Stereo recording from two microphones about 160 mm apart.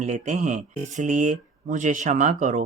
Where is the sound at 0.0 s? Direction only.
50° right (ahead or behind).